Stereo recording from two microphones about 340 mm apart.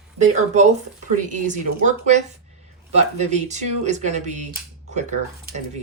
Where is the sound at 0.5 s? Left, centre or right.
Centre.